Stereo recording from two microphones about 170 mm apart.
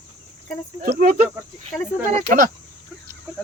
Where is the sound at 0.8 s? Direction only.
60° right (ahead or behind).